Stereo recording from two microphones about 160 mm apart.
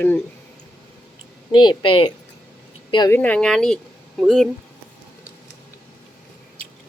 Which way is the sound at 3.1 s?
10° left (ahead or behind).